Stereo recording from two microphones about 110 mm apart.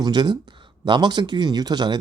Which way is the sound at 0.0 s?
40° right (ahead or behind).